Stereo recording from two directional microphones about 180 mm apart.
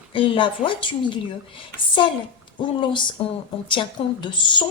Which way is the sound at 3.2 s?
30° left (ahead or behind).